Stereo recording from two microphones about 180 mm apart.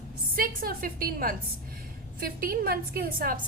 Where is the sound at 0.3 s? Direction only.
55° right (ahead or behind).